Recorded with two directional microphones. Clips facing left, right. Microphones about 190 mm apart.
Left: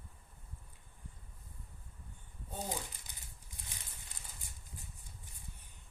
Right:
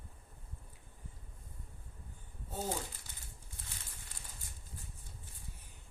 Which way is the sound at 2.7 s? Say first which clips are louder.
Right 3 dB; 15° left (ahead or behind).